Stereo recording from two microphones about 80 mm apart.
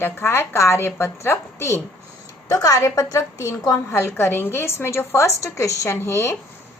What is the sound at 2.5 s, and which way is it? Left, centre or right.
A woman's voice, left.